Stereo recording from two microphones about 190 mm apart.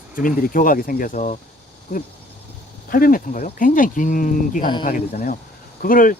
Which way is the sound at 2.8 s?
50° left (ahead or behind).